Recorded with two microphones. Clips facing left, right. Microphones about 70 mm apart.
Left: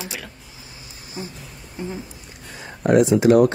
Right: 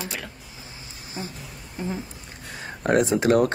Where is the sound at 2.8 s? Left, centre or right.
Right.